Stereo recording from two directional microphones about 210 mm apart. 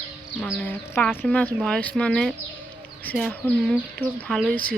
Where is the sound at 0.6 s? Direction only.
10° left (ahead or behind).